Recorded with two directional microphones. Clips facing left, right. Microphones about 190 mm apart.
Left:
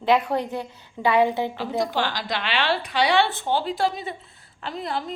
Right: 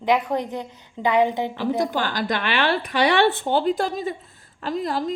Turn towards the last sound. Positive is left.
turn(degrees=-40)  # may be behind; listen again after turning